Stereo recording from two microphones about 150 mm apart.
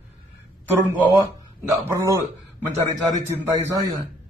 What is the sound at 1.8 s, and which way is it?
Speech, 20° right (ahead or behind).